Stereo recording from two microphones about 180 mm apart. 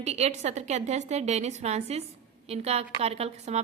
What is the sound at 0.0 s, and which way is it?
A woman's voice, 35° right (ahead or behind).